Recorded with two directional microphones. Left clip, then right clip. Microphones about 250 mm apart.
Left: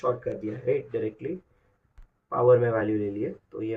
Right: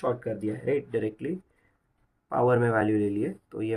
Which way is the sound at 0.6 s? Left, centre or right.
Right.